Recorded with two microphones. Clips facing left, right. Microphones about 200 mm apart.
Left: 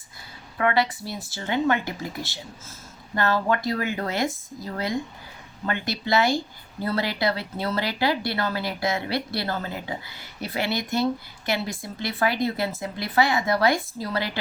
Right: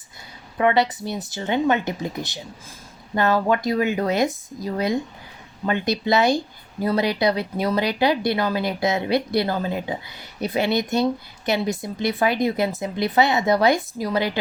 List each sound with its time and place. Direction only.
0.6 s speech: 20° right (ahead or behind)